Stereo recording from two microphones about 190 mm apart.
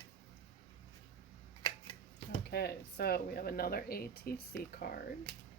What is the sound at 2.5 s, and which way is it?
Speech, 55° left (ahead or behind).